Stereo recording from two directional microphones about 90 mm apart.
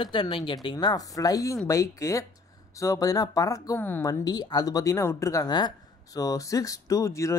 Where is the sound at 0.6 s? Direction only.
55° left (ahead or behind); by 5.5 s 35° left (ahead or behind).